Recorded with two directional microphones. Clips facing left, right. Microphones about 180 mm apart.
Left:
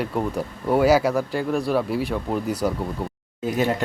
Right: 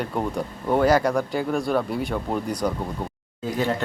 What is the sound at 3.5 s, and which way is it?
Speech, 20° left (ahead or behind).